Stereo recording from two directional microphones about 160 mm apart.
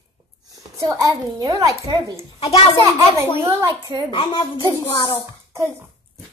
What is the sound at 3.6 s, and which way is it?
Speech, 20° right (ahead or behind).